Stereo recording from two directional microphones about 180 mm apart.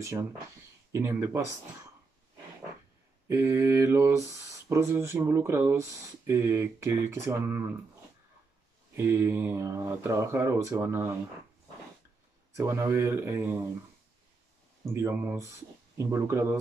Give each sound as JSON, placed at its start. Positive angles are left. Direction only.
{"t": 0.0, "sound": "speech", "side_deg": -15}
{"t": 3.3, "sound": "speech", "side_deg": -15}
{"t": 8.9, "sound": "speech", "side_deg": -15}
{"t": 12.5, "sound": "speech", "side_deg": -15}
{"t": 15.0, "sound": "speech", "side_deg": -15}